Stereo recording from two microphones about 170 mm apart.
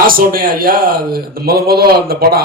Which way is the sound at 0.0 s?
55° right (ahead or behind).